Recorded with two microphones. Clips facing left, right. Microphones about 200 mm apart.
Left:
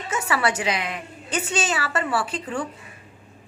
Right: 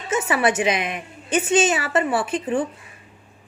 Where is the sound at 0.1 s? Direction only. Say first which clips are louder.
Right 4 dB; 20° right (ahead or behind).